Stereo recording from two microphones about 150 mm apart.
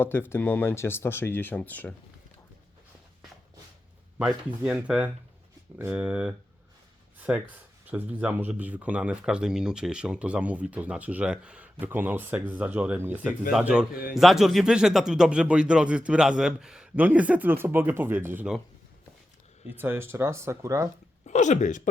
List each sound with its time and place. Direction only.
0.0 s speech: 15° left (ahead or behind)
4.2 s speech: 5° right (ahead or behind)
13.9 s a man's voice: 75° left (ahead or behind)
14.2 s speech: centre (ahead or behind)
19.8 s speech: 15° right (ahead or behind)
21.2 s speech: 50° left (ahead or behind)